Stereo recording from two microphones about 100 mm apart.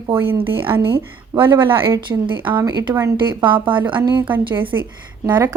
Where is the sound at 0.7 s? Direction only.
35° right (ahead or behind).